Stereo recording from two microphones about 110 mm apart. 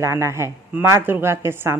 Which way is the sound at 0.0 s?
25° right (ahead or behind).